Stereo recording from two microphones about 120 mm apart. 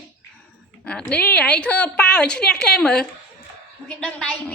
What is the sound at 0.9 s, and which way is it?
A woman's voice, 10° left (ahead or behind).